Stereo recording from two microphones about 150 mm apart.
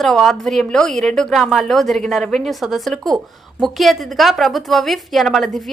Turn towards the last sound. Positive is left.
turn(degrees=0)  # may be behind; listen again after turning